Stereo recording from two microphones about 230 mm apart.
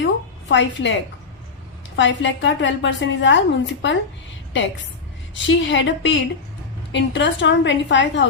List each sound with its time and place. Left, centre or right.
0.0 s a sound: left
2.0 s a woman's voice: left
5.3 s a woman's voice: left